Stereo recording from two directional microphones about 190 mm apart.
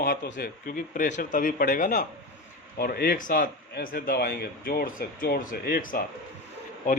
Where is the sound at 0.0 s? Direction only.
50° left (ahead or behind).